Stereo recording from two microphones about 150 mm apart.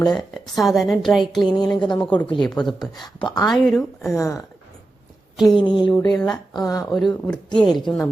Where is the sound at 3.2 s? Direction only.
30° left (ahead or behind).